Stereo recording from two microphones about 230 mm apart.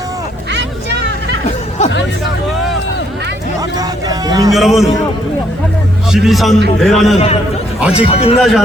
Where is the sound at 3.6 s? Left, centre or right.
Centre.